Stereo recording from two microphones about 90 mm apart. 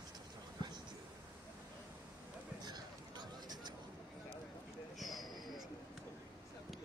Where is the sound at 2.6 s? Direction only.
50° right (ahead or behind).